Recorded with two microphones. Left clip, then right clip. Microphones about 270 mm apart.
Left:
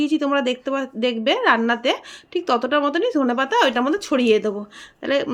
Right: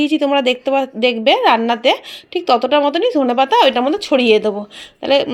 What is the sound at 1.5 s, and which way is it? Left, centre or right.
Speech, centre.